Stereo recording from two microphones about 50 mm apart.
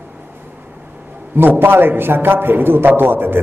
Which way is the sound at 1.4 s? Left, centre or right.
Right.